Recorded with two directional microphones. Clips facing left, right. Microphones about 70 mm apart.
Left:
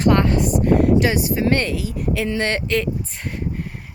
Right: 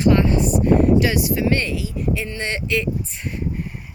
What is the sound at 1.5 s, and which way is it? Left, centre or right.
Speech, left.